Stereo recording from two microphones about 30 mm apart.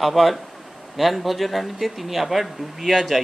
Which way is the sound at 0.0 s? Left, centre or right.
Centre.